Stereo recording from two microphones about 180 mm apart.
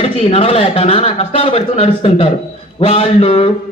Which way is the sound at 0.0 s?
35° left (ahead or behind).